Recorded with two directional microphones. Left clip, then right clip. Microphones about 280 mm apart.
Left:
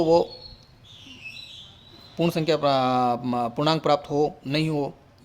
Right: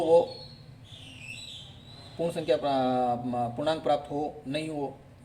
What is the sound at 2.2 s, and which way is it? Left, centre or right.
Speech, left.